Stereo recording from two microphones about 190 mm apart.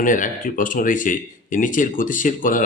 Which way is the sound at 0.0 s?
45° left (ahead or behind).